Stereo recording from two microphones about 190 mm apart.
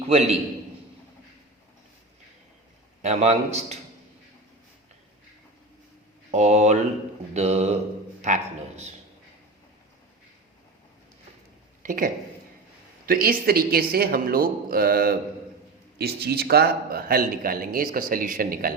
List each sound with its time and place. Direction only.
0.0 s a man's voice: 35° right (ahead or behind)
3.0 s a man's voice: 35° right (ahead or behind)
6.3 s a man's voice: 35° right (ahead or behind)
11.8 s a man's voice: 45° right (ahead or behind)